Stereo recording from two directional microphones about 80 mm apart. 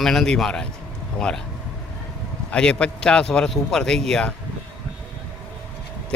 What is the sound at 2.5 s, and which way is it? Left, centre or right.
Speech, centre.